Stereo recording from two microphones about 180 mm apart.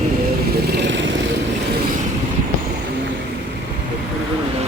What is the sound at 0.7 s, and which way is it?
Vehicle, 80° right.